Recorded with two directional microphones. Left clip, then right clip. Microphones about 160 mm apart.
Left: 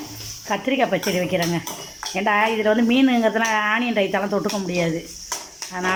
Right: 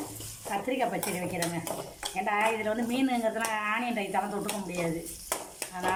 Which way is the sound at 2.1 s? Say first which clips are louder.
Left 9 dB; 60° left (ahead or behind).